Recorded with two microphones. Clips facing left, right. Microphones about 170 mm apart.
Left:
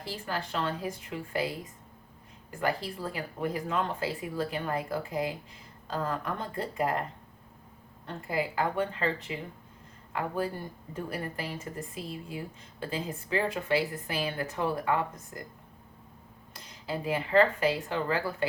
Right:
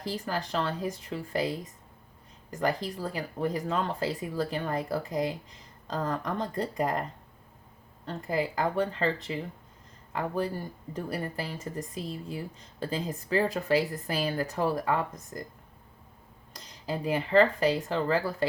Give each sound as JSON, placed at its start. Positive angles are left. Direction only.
{"t": 0.0, "sound": "speech", "side_deg": -35}
{"t": 8.3, "sound": "speech", "side_deg": -35}
{"t": 10.9, "sound": "speech", "side_deg": -35}
{"t": 16.5, "sound": "speech", "side_deg": -35}